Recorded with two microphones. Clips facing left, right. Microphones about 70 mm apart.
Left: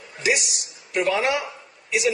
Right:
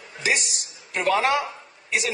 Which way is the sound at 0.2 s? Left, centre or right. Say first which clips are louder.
Left 2 dB; right.